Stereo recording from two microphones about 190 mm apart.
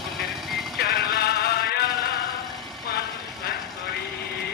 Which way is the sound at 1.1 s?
55° left (ahead or behind).